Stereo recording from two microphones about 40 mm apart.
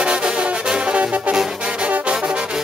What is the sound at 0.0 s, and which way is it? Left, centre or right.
Music, right.